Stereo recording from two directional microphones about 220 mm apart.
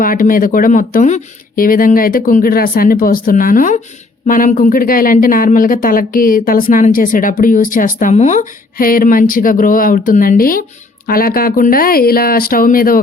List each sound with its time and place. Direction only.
0.0 s a woman's voice: 40° left (ahead or behind)